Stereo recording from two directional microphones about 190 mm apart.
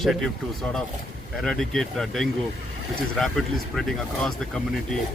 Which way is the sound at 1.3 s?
Centre (ahead or behind).